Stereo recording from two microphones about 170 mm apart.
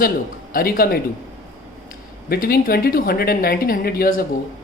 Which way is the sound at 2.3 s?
60° left (ahead or behind).